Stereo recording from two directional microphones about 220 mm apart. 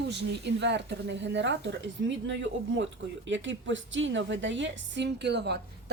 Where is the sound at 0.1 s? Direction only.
50° right (ahead or behind).